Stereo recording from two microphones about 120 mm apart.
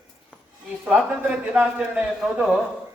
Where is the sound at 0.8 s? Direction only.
10° right (ahead or behind).